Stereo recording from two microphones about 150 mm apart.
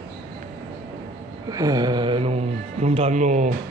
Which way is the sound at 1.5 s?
25° right (ahead or behind).